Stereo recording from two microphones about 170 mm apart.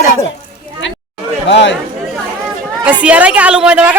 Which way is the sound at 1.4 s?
90° left.